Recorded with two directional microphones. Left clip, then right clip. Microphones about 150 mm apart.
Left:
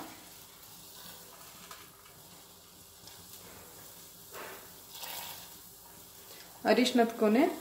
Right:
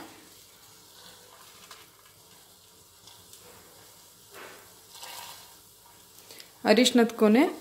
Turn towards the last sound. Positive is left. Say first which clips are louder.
# right 4 dB
turn(degrees=-90)